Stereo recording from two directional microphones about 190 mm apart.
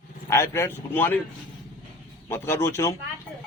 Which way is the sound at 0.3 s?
15° left (ahead or behind).